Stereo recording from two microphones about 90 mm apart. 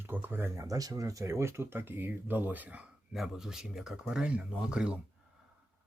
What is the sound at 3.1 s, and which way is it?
Speech, 5° right (ahead or behind).